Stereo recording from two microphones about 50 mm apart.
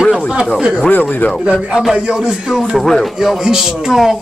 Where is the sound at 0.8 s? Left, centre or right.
Left.